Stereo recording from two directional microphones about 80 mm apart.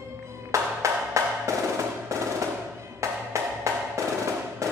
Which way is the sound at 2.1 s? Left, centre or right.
Right.